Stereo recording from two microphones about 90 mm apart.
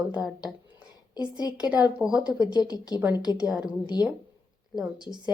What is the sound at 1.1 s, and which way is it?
Speech, 50° left (ahead or behind).